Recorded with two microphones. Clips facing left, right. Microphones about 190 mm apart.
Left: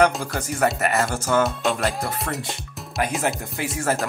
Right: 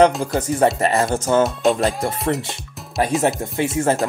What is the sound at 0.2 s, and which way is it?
Speech, 25° right (ahead or behind).